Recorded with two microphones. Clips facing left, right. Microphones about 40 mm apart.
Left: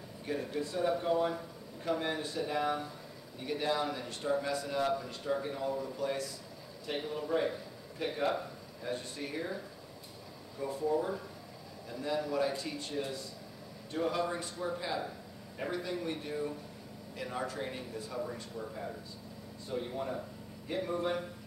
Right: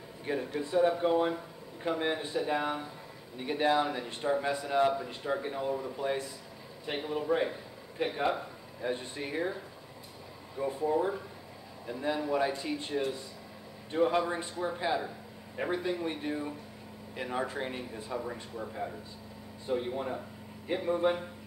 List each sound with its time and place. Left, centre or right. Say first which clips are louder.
0.2 s a man's voice: right 2 dB; right
10.6 s a man's voice: right 3 dB; right